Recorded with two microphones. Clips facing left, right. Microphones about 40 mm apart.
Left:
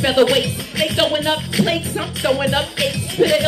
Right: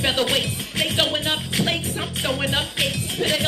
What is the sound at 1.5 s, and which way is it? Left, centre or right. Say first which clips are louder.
Music: left 5 dB; left.